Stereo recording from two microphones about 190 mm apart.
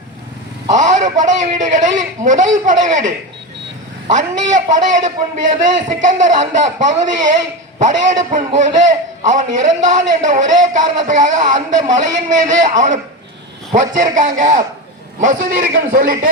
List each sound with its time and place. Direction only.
0.8 s a man's voice: 40° right (ahead or behind)
4.5 s a man's voice: 40° right (ahead or behind)